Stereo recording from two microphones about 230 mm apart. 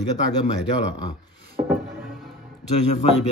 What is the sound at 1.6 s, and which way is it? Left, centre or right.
Music, centre.